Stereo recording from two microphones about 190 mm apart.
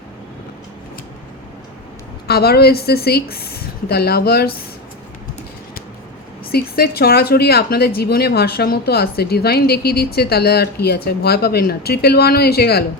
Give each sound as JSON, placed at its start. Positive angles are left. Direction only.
{"t": 2.2, "sound": "speech", "side_deg": 55}
{"t": 6.5, "sound": "speech", "side_deg": 55}